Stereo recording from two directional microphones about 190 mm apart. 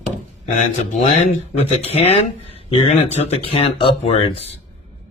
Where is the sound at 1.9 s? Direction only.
35° left (ahead or behind).